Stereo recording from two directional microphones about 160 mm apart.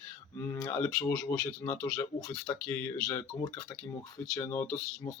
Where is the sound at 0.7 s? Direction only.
5° left (ahead or behind).